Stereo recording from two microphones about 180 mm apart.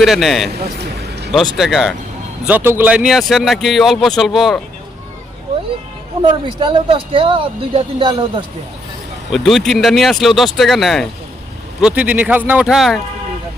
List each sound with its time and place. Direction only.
0.0 s speech: centre (ahead or behind)
0.5 s a sound: 65° right (ahead or behind)
1.3 s speech: centre (ahead or behind)
6.2 s speech: 25° right (ahead or behind)
9.3 s a man's voice: centre (ahead or behind)